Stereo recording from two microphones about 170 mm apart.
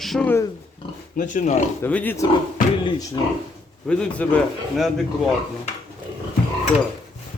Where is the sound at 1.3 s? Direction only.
45° left (ahead or behind).